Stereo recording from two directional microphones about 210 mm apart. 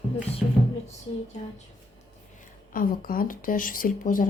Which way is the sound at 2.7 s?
40° left (ahead or behind).